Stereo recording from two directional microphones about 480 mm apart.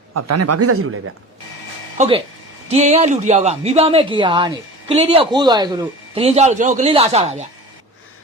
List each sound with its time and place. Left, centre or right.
0.1 s speech: right
2.0 s speech: centre